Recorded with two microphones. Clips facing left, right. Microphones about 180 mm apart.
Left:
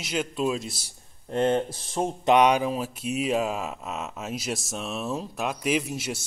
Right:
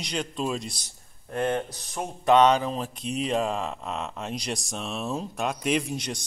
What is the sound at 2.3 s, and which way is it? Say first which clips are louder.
Speech: right 1 dB; 10° left (ahead or behind).